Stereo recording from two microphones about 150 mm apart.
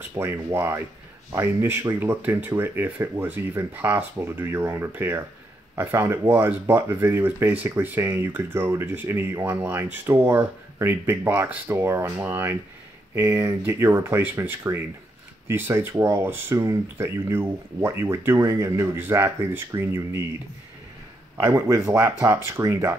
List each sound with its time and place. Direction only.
0.2 s speech: 15° right (ahead or behind)
21.4 s speech: 15° right (ahead or behind)